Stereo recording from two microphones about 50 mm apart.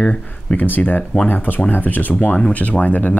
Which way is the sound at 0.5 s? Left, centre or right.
Left.